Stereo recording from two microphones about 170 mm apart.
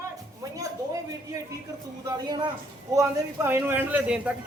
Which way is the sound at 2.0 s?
25° right (ahead or behind).